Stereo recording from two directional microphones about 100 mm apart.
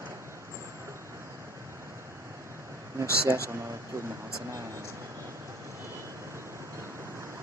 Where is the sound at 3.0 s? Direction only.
30° right (ahead or behind).